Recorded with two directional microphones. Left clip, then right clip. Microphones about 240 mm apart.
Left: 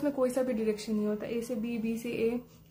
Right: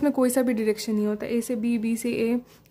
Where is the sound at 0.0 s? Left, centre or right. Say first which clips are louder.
Right 6 dB; right.